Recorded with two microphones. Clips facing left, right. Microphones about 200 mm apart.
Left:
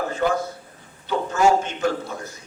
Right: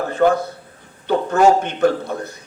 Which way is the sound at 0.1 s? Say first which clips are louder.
Right 6 dB; 60° right (ahead or behind).